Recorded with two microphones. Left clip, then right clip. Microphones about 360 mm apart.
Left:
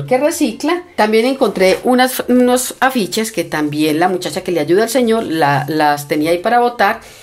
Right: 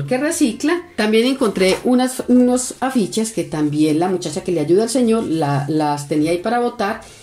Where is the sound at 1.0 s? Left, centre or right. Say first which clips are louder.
Left 5 dB; centre.